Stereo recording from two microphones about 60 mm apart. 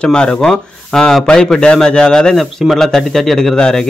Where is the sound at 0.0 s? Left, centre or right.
Centre.